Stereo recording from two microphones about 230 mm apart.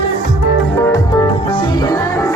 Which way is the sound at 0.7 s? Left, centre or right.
Centre.